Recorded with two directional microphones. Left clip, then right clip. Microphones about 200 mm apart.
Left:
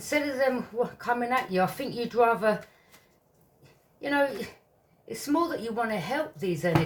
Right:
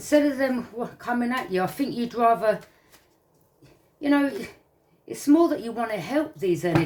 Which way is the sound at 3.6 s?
35° right (ahead or behind).